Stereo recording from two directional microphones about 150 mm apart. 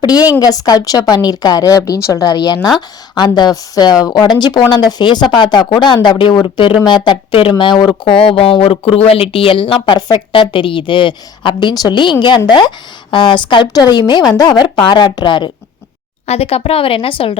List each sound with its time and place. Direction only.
0.0 s a woman's voice: 25° left (ahead or behind)
16.2 s speech: 45° left (ahead or behind)